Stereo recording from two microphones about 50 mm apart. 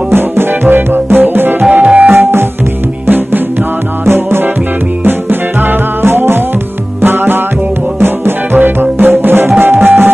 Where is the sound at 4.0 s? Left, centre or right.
Right.